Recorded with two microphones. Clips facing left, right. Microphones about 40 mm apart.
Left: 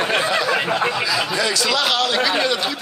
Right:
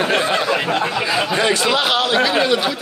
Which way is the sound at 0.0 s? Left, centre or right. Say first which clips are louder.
Right 2 dB; centre.